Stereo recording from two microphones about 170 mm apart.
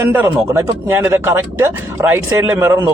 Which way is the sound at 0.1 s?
15° right (ahead or behind).